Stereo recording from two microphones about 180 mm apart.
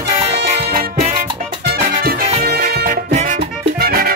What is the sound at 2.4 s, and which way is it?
Music, 60° right (ahead or behind).